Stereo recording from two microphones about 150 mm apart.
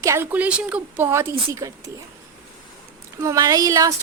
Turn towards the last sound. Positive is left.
turn(degrees=-25)  # may be behind; listen again after turning